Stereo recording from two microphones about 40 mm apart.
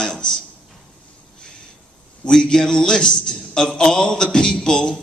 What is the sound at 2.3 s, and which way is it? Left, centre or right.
A man's voice, centre.